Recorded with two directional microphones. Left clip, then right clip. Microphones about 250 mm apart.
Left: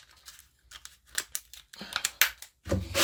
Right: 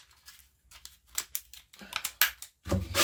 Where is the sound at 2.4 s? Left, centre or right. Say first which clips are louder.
Left 1 dB; centre.